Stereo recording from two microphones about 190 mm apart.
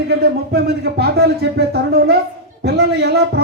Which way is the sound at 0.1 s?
60° right (ahead or behind).